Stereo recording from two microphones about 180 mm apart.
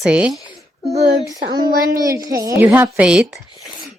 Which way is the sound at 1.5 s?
20° right (ahead or behind).